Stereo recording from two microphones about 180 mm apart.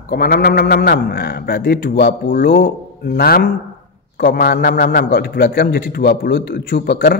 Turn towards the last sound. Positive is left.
turn(degrees=55)  # may be behind; listen again after turning